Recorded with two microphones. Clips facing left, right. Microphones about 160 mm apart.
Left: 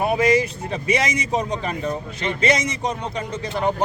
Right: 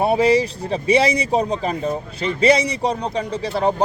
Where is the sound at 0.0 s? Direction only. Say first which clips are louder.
Right 3 dB; 30° right (ahead or behind).